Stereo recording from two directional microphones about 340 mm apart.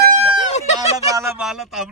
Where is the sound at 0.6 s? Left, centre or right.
Centre.